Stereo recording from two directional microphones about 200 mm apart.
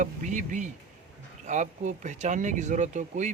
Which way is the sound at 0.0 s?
40° right (ahead or behind).